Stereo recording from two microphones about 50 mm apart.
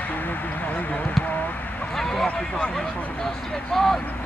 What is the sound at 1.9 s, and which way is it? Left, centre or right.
Speech, centre.